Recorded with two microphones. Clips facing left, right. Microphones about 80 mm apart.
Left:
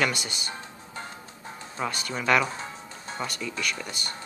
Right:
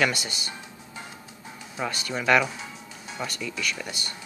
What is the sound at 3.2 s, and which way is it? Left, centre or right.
Speech, centre.